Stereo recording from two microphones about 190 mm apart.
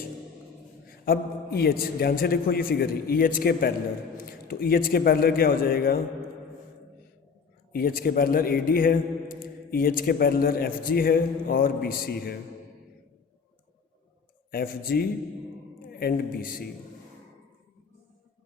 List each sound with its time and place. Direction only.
0.9 s a man's voice: 50° left (ahead or behind)
7.7 s a man's voice: 50° left (ahead or behind)
14.5 s a man's voice: 50° left (ahead or behind)